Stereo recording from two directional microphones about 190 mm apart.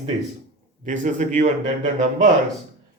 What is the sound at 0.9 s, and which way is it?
Speech, 40° right (ahead or behind).